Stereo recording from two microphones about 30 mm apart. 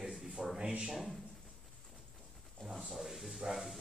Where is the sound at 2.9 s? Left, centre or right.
Centre.